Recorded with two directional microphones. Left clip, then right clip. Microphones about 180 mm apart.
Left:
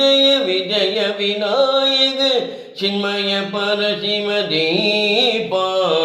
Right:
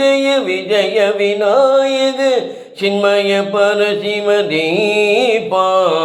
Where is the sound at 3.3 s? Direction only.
30° right (ahead or behind).